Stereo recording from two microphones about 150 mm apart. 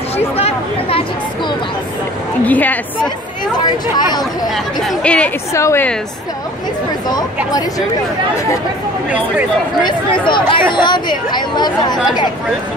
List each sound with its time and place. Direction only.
0.4 s speech: 40° left (ahead or behind)
2.4 s a woman's voice: 10° left (ahead or behind)
3.5 s speech: 30° left (ahead or behind)
4.7 s a woman's voice: 5° left (ahead or behind)
5.5 s speech: 20° left (ahead or behind)
9.8 s speech: 30° left (ahead or behind)